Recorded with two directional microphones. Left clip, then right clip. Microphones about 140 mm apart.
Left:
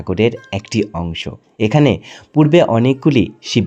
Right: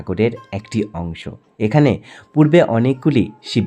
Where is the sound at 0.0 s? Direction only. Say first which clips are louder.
Left 3 dB; 15° left (ahead or behind).